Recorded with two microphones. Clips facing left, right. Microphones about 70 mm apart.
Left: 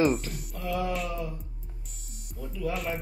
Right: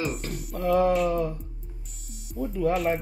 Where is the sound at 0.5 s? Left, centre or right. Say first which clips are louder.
Right 9 dB; right.